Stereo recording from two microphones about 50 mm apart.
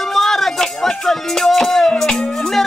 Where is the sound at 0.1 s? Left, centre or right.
Centre.